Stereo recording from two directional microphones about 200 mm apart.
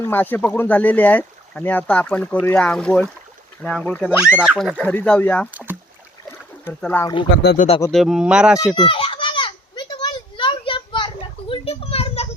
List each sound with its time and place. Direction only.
0.0 s speech: 10° left (ahead or behind)
6.7 s speech: 10° left (ahead or behind)
7.4 s speech: 40° left (ahead or behind)
7.8 s speech: 5° left (ahead or behind)
8.7 s children playing: 25° left (ahead or behind)